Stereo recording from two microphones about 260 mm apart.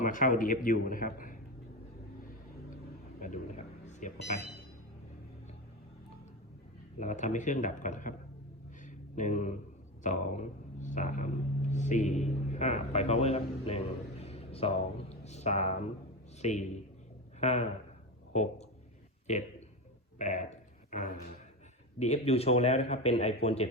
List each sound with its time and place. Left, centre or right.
0.0 s a man's voice: left
3.2 s speech: left
7.0 s speech: left
8.8 s a sound: left
10.0 s a man's voice: left
20.1 s a sound: left
21.9 s speech: left